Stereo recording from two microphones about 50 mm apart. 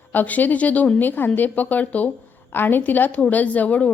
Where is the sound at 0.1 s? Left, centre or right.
Left.